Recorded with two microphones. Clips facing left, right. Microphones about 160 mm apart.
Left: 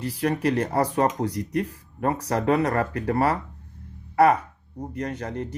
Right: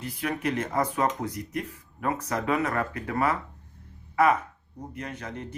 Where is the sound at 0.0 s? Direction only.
35° left (ahead or behind).